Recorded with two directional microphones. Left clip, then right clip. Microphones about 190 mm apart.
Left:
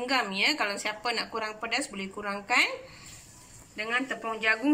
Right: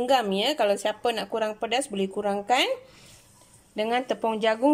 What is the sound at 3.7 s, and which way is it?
Speech, 45° right (ahead or behind).